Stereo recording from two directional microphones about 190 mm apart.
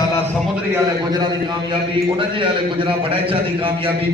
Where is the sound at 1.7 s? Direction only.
25° right (ahead or behind).